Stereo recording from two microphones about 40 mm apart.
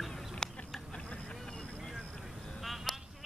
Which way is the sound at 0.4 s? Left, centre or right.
Centre.